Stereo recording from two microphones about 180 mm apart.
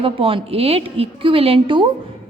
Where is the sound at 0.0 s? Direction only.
30° right (ahead or behind).